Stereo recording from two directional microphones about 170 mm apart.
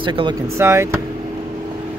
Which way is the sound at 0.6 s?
15° right (ahead or behind).